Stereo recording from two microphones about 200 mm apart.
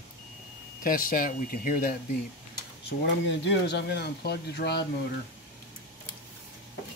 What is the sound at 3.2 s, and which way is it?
Speech, 60° left (ahead or behind).